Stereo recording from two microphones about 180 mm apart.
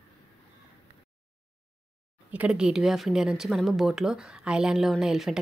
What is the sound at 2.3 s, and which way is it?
Speech, 5° right (ahead or behind).